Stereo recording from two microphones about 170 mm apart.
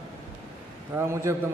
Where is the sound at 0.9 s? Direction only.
15° right (ahead or behind).